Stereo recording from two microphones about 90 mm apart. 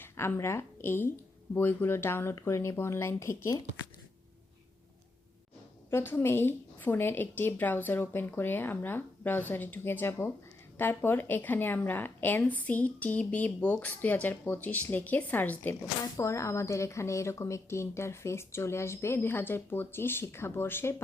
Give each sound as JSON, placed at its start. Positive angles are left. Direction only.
{"t": 0.0, "sound": "speech", "side_deg": 25}
{"t": 5.9, "sound": "speech", "side_deg": 25}
{"t": 16.1, "sound": "speech", "side_deg": 35}